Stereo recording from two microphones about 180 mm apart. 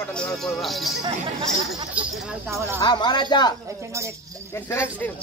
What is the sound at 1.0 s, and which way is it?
Speech, 20° right (ahead or behind).